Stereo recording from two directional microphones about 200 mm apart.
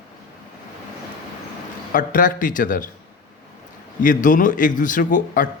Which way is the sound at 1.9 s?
40° left (ahead or behind).